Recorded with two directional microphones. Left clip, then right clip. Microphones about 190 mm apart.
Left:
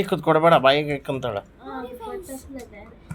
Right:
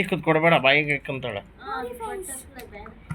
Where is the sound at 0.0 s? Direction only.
15° left (ahead or behind).